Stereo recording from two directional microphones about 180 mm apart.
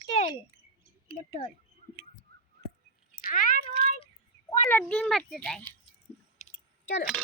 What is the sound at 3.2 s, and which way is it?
Speech, 45° left (ahead or behind).